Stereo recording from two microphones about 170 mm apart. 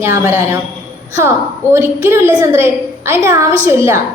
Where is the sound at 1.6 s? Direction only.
15° right (ahead or behind).